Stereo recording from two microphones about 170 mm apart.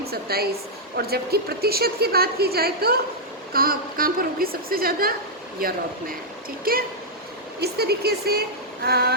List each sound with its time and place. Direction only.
0.0 s a woman's voice: 65° right (ahead or behind)
7.6 s speech: 70° right (ahead or behind)